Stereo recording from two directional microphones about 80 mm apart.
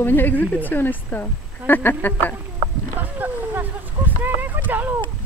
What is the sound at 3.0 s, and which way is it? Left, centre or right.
Speech, right.